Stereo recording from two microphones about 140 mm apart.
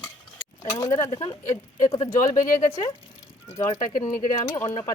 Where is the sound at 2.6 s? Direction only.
55° left (ahead or behind).